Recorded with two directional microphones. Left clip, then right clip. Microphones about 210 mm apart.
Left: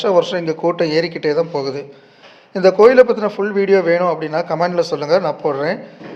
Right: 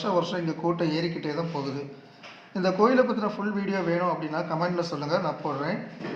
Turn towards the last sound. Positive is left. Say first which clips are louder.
# left 11 dB
turn(degrees=35)  # may be behind; listen again after turning